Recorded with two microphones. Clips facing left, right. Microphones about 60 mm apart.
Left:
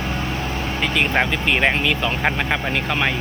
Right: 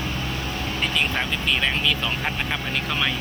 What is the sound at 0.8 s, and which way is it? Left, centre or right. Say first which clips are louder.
Speech: left 6 dB; left.